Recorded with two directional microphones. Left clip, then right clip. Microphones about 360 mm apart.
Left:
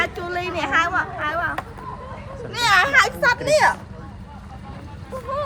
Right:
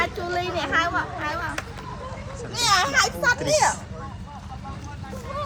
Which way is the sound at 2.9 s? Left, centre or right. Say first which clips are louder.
Left 4 dB; left.